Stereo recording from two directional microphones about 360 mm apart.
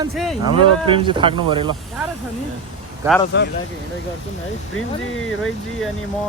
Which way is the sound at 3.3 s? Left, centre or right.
Left.